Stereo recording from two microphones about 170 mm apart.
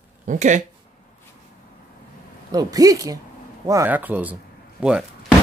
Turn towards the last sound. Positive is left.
turn(degrees=-5)  # may be behind; listen again after turning